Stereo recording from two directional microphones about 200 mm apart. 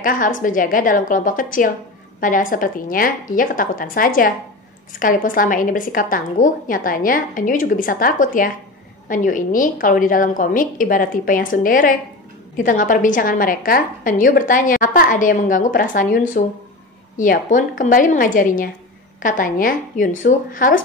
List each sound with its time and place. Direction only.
0.0 s a woman's voice: 40° left (ahead or behind)